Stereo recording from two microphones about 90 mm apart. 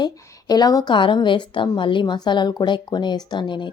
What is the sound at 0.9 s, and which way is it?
A woman's voice, 65° left (ahead or behind).